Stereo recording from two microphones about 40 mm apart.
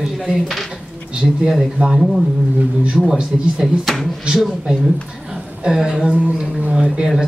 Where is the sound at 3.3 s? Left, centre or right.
Centre.